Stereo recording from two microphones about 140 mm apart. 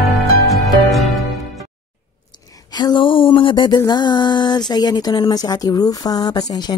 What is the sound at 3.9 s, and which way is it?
A woman's voice, 30° left (ahead or behind).